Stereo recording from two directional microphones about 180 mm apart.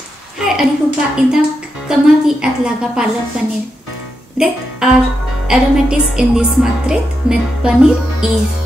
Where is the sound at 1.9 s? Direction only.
5° right (ahead or behind).